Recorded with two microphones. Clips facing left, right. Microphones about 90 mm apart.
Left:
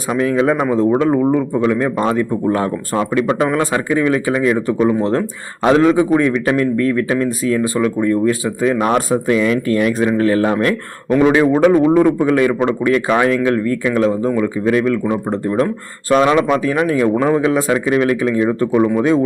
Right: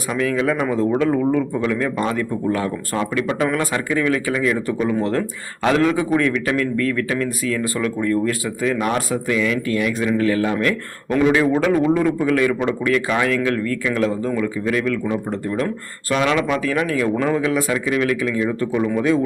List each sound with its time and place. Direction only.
0.2 s a man's voice: 30° left (ahead or behind)
2.5 s a man's voice: 35° left (ahead or behind)